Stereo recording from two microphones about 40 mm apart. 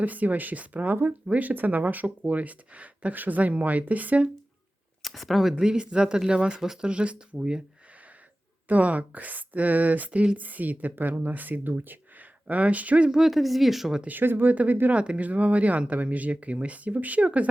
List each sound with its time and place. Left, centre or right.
0.0 s speech: right
5.0 s speech: centre
5.6 s speech: right
8.6 s speech: right
12.5 s speech: right
13.1 s speech: centre
14.1 s speech: right
14.5 s speech: right